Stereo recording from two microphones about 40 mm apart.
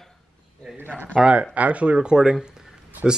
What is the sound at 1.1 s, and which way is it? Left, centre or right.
Speech, right.